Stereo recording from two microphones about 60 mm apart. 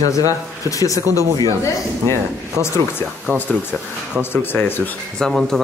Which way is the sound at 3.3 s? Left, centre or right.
Left.